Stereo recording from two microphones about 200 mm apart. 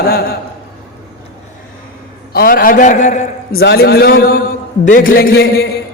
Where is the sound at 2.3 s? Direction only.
50° left (ahead or behind).